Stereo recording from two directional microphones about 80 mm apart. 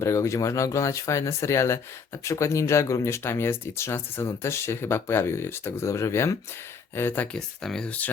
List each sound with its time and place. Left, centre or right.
0.0 s speech: left
7.3 s speech: centre